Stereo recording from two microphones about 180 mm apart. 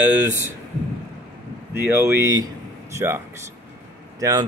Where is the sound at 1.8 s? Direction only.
10° right (ahead or behind).